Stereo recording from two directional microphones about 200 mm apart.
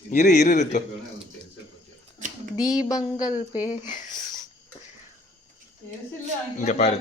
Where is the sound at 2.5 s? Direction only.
5° right (ahead or behind).